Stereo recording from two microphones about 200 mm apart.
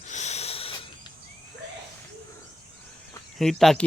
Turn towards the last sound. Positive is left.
turn(degrees=0)  # may be behind; listen again after turning